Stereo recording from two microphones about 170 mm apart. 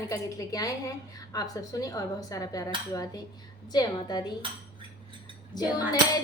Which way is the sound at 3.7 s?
25° left (ahead or behind).